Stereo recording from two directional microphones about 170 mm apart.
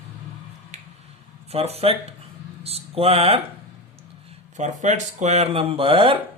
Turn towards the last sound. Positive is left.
turn(degrees=-35)  # may be behind; listen again after turning